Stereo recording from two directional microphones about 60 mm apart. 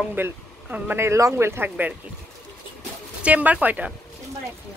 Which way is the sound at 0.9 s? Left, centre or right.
Right.